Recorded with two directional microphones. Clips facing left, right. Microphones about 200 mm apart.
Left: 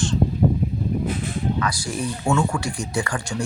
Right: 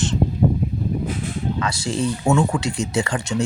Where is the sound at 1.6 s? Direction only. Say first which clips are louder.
Right 2 dB; 25° right (ahead or behind).